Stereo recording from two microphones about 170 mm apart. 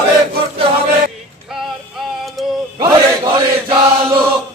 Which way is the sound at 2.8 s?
25° right (ahead or behind).